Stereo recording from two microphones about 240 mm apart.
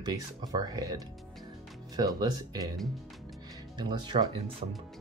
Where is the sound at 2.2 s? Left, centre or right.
Centre.